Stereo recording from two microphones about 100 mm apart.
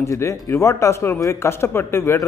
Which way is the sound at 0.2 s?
30° left (ahead or behind).